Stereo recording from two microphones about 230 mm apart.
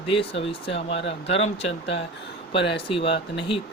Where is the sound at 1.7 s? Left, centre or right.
Left.